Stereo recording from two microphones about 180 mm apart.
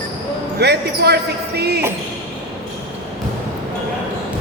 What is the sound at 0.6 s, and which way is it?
Speech, 65° right (ahead or behind).